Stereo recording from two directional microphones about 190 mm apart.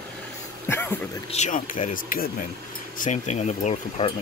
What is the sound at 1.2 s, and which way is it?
Speech, 40° left (ahead or behind).